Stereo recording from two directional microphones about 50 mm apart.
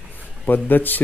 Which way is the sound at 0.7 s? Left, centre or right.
Left.